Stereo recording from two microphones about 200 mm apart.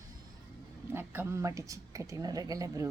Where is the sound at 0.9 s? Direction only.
10° right (ahead or behind).